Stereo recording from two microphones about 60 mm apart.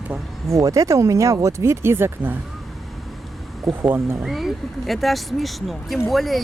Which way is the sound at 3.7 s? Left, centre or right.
Right.